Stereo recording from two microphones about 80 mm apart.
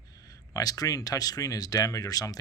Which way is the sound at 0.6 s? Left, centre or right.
Left.